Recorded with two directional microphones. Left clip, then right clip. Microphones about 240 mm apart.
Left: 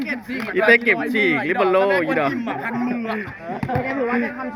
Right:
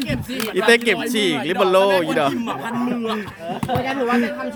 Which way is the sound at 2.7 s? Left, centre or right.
Centre.